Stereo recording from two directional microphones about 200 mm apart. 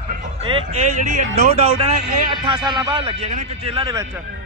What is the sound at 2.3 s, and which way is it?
A man's voice, 20° right (ahead or behind).